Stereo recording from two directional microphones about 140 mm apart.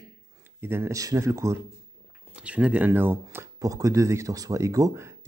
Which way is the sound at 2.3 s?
10° right (ahead or behind).